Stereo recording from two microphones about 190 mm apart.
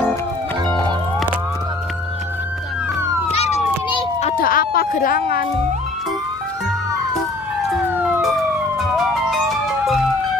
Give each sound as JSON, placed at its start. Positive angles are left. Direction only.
{"t": 3.3, "sound": "police car", "side_deg": 35}
{"t": 4.4, "sound": "a sound", "side_deg": 50}
{"t": 7.7, "sound": "emergency vehicle", "side_deg": 0}
{"t": 8.7, "sound": "music", "side_deg": 0}